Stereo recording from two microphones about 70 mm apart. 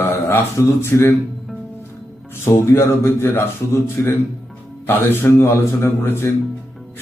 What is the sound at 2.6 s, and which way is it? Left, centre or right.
A man's voice, left.